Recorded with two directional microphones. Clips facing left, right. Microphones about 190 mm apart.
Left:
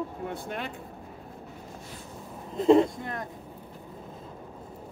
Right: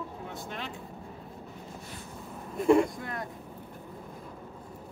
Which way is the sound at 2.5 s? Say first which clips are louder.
Left 3 dB; 20° left (ahead or behind).